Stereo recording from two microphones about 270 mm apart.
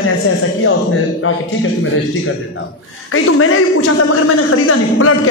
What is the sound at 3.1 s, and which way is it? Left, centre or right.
A man's voice, left.